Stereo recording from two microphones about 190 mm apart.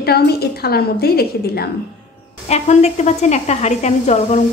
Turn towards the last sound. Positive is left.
turn(degrees=35)  # may be behind; listen again after turning